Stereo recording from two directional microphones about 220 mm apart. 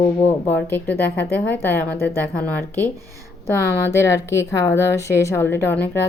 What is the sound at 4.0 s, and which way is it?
A woman's voice, 10° left (ahead or behind).